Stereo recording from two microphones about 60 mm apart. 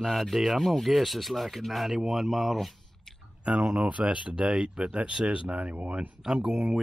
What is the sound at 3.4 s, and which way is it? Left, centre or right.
Speech, centre.